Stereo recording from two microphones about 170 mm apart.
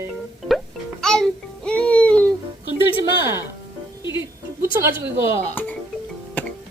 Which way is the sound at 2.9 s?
15° right (ahead or behind).